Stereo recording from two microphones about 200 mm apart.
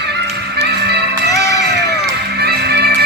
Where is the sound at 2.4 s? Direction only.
55° right (ahead or behind).